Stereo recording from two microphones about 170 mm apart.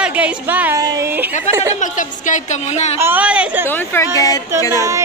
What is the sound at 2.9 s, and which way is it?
Speech, 10° right (ahead or behind).